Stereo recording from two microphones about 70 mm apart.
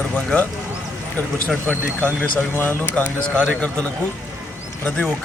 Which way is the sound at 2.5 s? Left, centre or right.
Left.